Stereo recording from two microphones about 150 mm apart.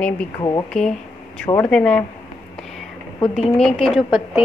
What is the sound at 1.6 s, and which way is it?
Speech, 5° left (ahead or behind).